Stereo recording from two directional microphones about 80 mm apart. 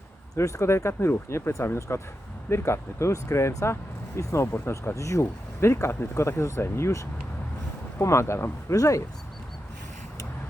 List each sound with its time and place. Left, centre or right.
0.3 s speech: left